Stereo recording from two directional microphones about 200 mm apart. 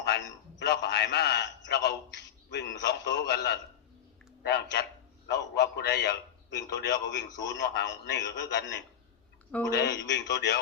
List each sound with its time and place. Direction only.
0.0 s a man's voice: 60° left (ahead or behind)